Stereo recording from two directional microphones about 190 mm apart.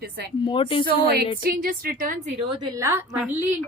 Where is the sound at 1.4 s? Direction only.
50° right (ahead or behind).